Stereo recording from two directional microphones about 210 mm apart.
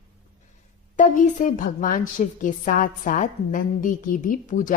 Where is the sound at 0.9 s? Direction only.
40° left (ahead or behind).